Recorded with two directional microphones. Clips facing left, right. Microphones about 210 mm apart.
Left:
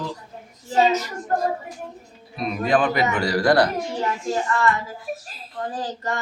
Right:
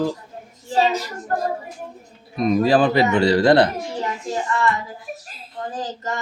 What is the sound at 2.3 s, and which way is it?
A man's voice, 35° right (ahead or behind).